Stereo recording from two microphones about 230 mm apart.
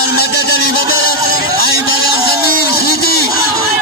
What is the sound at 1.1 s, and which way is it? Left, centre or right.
Music, left.